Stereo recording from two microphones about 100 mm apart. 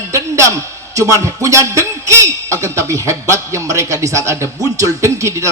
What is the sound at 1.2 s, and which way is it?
A man's voice, 30° right (ahead or behind).